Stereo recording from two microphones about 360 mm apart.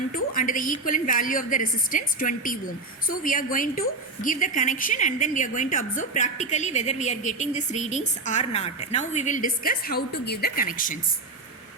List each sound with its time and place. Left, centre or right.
0.1 s a woman's voice: left